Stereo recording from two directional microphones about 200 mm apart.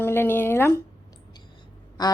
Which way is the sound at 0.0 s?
10° left (ahead or behind).